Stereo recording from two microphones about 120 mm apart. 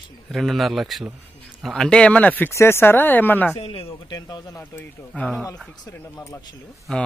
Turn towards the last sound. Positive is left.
turn(degrees=5)  # may be behind; listen again after turning